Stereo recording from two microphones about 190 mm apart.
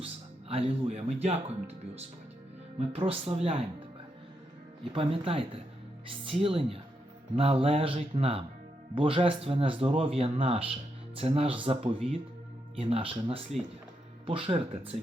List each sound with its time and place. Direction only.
0.0 s speech: 30° right (ahead or behind)
2.7 s speech: 30° right (ahead or behind)
4.8 s speech: 30° right (ahead or behind)